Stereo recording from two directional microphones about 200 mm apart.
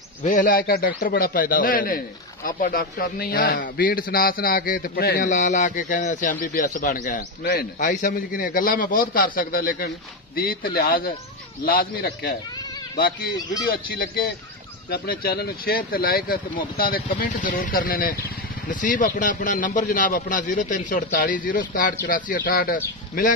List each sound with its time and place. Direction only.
0.2 s a man's voice: 40° left (ahead or behind)
13.7 s a man's voice: 50° left (ahead or behind)